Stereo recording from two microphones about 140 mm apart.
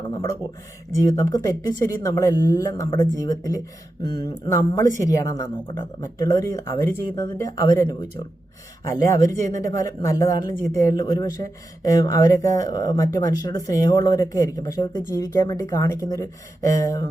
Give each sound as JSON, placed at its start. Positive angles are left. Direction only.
{"t": 1.0, "sound": "speech", "side_deg": 25}